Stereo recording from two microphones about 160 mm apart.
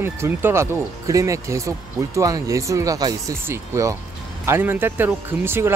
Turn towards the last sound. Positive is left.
turn(degrees=-15)  # may be behind; listen again after turning